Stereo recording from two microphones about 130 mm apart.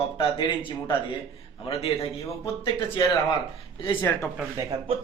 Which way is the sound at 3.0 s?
30° left (ahead or behind).